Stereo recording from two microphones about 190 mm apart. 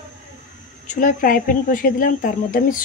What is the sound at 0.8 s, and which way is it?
Speech, 40° left (ahead or behind).